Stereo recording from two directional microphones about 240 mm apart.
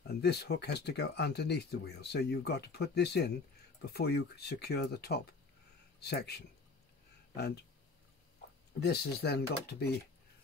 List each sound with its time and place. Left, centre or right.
0.0 s speech: left
8.7 s speech: left